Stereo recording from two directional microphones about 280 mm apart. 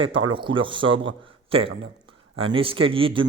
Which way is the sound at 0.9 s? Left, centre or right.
Right.